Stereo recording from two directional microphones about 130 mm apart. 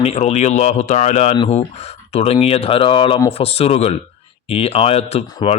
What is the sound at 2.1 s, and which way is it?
Speech, 50° left (ahead or behind).